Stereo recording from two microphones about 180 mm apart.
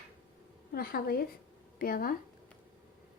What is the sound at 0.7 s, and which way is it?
A woman's voice, 55° left (ahead or behind).